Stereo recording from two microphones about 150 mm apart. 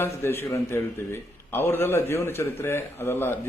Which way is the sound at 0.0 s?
15° left (ahead or behind).